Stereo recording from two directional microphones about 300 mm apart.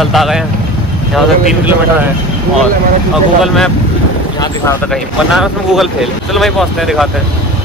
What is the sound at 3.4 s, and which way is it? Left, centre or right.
Speech, centre.